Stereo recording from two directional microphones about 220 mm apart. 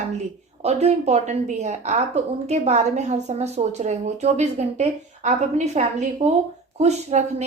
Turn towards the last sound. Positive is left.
turn(degrees=-30)  # may be behind; listen again after turning